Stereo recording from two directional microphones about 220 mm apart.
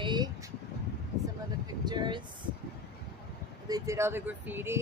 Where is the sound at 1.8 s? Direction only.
20° right (ahead or behind).